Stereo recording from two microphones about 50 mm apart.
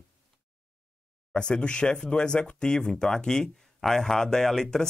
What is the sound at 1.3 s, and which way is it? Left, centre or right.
Speech, centre.